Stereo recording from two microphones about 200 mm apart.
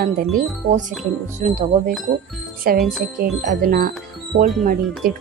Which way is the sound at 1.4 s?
40° right (ahead or behind).